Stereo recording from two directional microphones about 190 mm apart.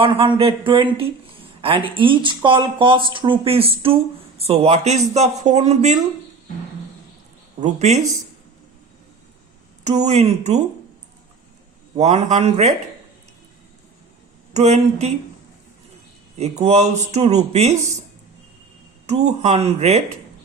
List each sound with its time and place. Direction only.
0.0 s speech: 30° right (ahead or behind)
7.6 s speech: 35° right (ahead or behind)
9.8 s speech: 35° right (ahead or behind)
11.9 s speech: 35° right (ahead or behind)
14.5 s speech: 35° right (ahead or behind)
16.4 s speech: 35° right (ahead or behind)
19.0 s speech: 35° right (ahead or behind)